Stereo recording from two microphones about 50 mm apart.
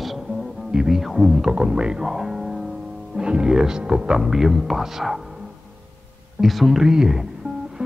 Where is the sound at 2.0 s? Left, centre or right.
Centre.